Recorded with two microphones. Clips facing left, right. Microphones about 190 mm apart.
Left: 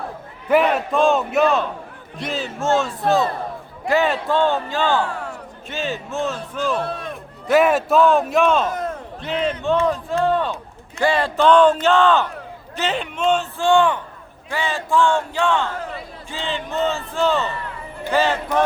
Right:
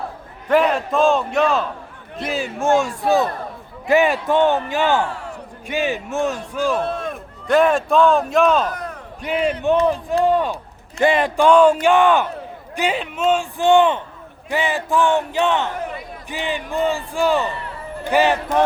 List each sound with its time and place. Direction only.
0.4 s speech: 5° left (ahead or behind)
2.1 s speech: 5° right (ahead or behind)
7.4 s speech: 5° left (ahead or behind)
9.2 s a man's voice: 10° right (ahead or behind)
13.6 s speech: 20° right (ahead or behind)